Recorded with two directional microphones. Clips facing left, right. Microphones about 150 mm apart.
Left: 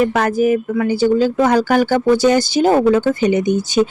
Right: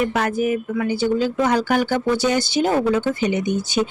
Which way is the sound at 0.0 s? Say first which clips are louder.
Left 5 dB; 40° left (ahead or behind).